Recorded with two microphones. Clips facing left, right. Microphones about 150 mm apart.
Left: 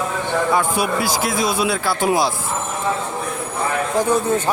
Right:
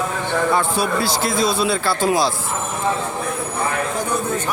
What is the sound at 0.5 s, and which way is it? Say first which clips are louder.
A man's voice: even; 10° left (ahead or behind).